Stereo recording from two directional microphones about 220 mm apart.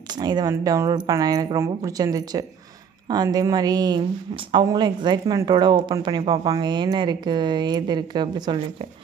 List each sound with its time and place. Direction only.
0.2 s speech: 20° right (ahead or behind)